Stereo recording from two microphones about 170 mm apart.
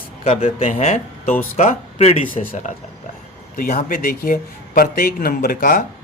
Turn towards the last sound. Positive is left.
turn(degrees=55)  # may be behind; listen again after turning